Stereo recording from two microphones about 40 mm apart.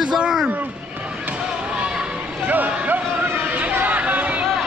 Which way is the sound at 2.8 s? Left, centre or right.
Right.